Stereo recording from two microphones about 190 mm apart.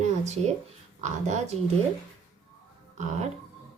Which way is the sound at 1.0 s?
35° right (ahead or behind).